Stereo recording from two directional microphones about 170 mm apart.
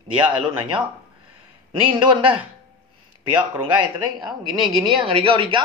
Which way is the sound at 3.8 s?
5° right (ahead or behind).